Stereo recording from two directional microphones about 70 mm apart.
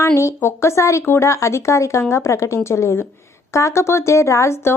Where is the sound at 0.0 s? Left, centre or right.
Left.